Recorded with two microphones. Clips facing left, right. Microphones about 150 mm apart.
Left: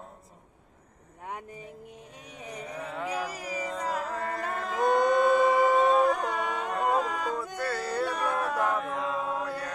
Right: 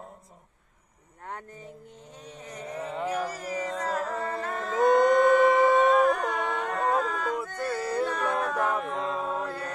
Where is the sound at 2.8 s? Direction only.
10° right (ahead or behind).